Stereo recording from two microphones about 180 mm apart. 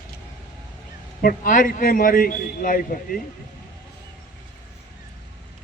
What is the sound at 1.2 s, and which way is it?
A man's voice, 45° left (ahead or behind).